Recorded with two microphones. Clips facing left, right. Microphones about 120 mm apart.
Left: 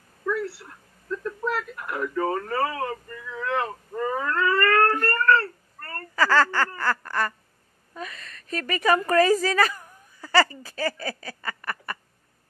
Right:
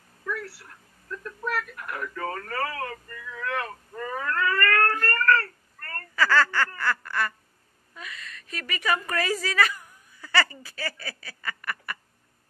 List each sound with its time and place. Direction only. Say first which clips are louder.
0.2 s a sound: left 6 dB; 20° left (ahead or behind)
6.1 s speech: left 2 dB; 35° left (ahead or behind)
7.1 s quack: left 2 dB; 35° left (ahead or behind)
7.9 s a woman's voice: left 5 dB; 35° left (ahead or behind)